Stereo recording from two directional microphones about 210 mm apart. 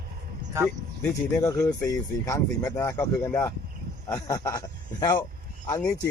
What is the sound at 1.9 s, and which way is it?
Speech, 15° left (ahead or behind).